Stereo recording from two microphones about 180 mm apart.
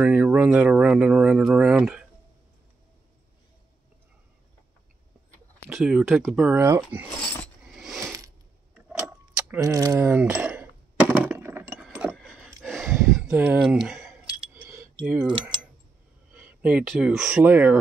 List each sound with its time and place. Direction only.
0.0 s speech: 5° right (ahead or behind)
5.7 s speech: centre (ahead or behind)
7.7 s mechanisms: centre (ahead or behind)
8.7 s keys jangling: 5° right (ahead or behind)
11.1 s a sound: 15° right (ahead or behind)
11.8 s chink: 10° right (ahead or behind)
13.1 s speech: 5° right (ahead or behind)
16.3 s speech: 5° right (ahead or behind)